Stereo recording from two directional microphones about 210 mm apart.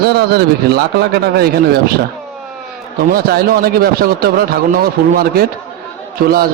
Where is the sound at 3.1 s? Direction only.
45° right (ahead or behind).